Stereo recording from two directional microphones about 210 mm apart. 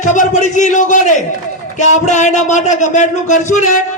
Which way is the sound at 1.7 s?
35° left (ahead or behind).